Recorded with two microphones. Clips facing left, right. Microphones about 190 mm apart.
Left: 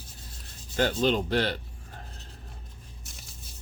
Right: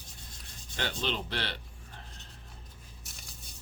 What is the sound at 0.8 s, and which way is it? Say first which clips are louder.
Speech: left 10 dB; 45° left (ahead or behind).